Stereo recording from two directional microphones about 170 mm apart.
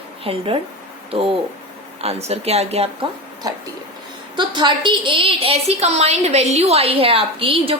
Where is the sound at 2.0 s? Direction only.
35° right (ahead or behind).